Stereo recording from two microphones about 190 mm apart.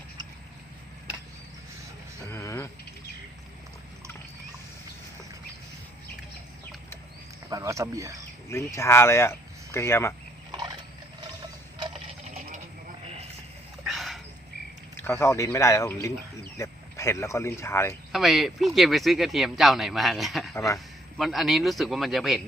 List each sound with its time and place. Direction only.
2.2 s vehicle: 15° left (ahead or behind)
7.5 s speech: 15° right (ahead or behind)
8.4 s speech: 15° left (ahead or behind)
10.5 s wild animals: 25° right (ahead or behind)
13.8 s a sound: centre (ahead or behind)
14.9 s speech: 10° left (ahead or behind)
18.1 s speech: centre (ahead or behind)